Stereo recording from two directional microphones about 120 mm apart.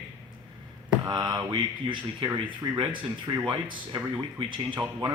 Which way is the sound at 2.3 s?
15° right (ahead or behind).